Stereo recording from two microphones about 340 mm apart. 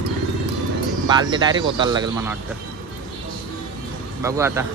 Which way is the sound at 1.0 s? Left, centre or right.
Centre.